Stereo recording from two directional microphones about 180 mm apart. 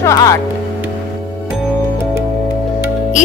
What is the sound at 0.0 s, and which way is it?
Speech, 20° left (ahead or behind).